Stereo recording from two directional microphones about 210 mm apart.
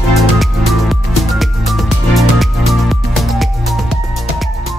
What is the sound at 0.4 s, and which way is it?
Music, centre (ahead or behind).